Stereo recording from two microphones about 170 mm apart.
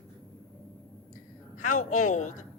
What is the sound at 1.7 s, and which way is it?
Speech, 50° left (ahead or behind).